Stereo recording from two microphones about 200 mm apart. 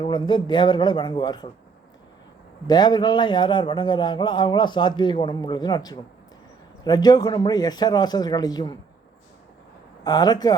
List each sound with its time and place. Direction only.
0.0 s a man's voice: 25° left (ahead or behind)
2.6 s a man's voice: 20° left (ahead or behind)
10.0 s a man's voice: 20° left (ahead or behind)